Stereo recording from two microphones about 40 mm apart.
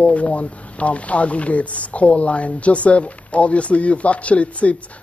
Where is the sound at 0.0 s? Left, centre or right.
Left.